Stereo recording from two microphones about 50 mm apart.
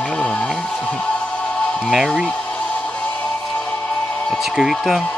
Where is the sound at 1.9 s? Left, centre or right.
Centre.